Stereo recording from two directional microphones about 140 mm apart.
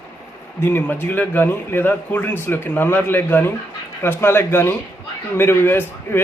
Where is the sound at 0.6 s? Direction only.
15° left (ahead or behind).